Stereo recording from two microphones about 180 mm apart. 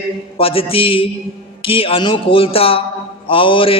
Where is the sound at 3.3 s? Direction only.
30° left (ahead or behind).